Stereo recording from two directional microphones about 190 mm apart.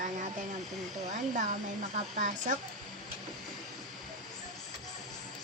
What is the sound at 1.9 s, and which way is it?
Speech, 40° right (ahead or behind).